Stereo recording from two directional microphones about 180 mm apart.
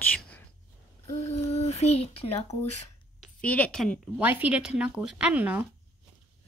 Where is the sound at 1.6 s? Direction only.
35° left (ahead or behind).